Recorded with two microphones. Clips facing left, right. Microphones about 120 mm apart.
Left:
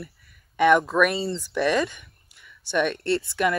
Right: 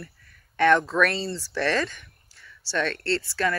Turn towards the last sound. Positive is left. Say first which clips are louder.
# left 3 dB
turn(degrees=20)  # may be behind; listen again after turning